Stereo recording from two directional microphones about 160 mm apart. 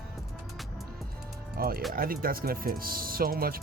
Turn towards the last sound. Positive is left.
turn(degrees=-65)  # may be behind; listen again after turning